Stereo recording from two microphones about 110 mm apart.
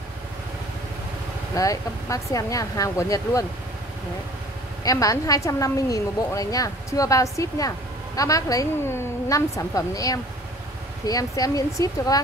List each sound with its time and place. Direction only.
1.5 s a woman's voice: 30° left (ahead or behind)
4.8 s a woman's voice: 30° left (ahead or behind)